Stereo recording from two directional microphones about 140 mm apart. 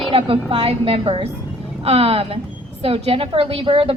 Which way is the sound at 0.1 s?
45° right (ahead or behind).